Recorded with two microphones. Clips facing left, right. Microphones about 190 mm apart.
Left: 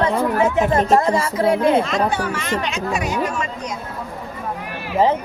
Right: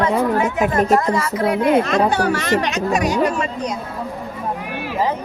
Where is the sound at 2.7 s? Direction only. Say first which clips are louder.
Right 4 dB; 40° right (ahead or behind).